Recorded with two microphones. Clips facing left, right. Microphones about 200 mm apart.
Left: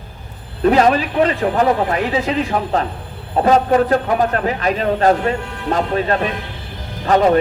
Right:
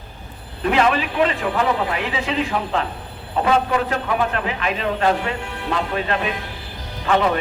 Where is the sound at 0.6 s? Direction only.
40° left (ahead or behind).